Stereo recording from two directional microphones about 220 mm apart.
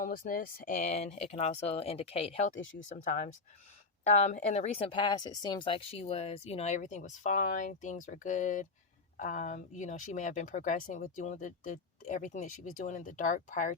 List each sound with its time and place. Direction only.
0.0 s speech: 40° left (ahead or behind)